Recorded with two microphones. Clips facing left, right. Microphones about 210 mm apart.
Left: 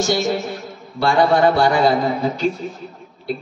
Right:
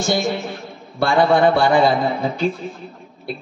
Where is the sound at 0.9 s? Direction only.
55° right (ahead or behind).